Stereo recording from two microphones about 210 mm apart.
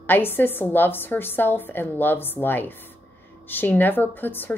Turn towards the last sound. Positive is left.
turn(degrees=10)  # may be behind; listen again after turning